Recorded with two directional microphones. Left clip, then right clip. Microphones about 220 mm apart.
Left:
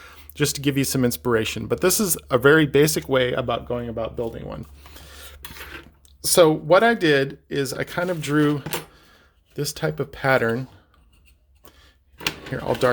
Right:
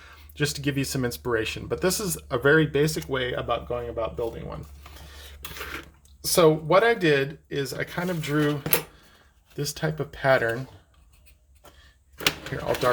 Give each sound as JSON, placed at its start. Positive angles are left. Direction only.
{"t": 0.0, "sound": "speech", "side_deg": 45}
{"t": 4.9, "sound": "a sound", "side_deg": 50}
{"t": 6.2, "sound": "speech", "side_deg": 50}
{"t": 12.5, "sound": "speech", "side_deg": 45}